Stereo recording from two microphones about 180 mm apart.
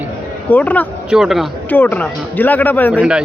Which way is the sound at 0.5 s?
10° left (ahead or behind).